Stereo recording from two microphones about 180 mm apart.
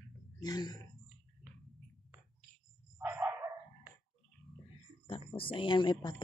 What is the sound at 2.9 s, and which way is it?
Dog, 10° right (ahead or behind).